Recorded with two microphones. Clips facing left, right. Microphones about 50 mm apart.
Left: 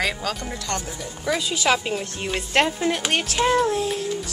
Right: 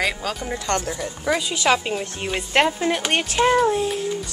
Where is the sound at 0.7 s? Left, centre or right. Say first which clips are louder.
Right 6 dB; right.